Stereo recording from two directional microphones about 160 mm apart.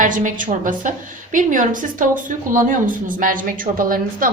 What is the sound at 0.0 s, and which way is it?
A woman's voice, 55° right (ahead or behind).